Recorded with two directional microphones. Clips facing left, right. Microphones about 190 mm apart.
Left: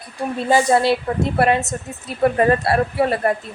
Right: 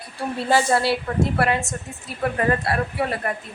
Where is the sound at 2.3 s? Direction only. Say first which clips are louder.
Left 3 dB; 35° left (ahead or behind).